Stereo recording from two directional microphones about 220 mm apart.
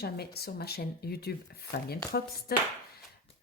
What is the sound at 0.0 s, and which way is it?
Speech, 45° left (ahead or behind).